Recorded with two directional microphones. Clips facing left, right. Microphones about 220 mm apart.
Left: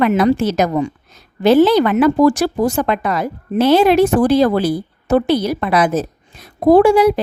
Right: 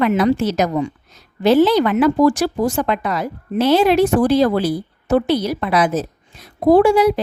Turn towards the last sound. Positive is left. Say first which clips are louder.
# left 2 dB
turn(degrees=50)  # may be behind; listen again after turning